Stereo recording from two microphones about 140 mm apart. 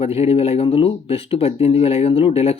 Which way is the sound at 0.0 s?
45° left (ahead or behind).